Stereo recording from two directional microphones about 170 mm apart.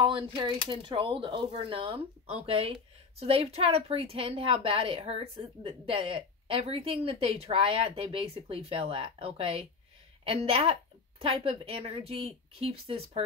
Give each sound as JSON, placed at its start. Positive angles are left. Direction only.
{"t": 0.0, "sound": "a woman's voice", "side_deg": -30}